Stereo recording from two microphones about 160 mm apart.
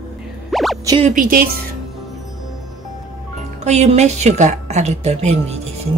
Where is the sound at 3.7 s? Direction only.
45° right (ahead or behind).